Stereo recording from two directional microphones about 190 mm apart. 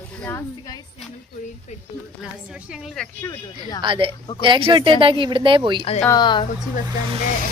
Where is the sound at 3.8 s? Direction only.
25° right (ahead or behind).